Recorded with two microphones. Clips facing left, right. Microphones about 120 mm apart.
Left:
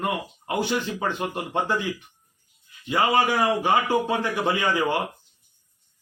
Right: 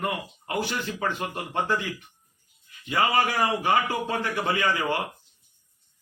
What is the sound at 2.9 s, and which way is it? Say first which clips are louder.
A man's voice: left 3 dB; 20° left (ahead or behind).